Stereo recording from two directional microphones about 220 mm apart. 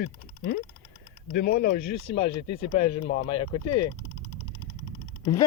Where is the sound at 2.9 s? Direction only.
30° left (ahead or behind).